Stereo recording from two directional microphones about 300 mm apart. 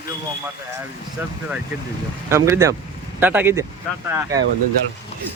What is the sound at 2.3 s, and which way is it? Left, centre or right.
Speech, centre.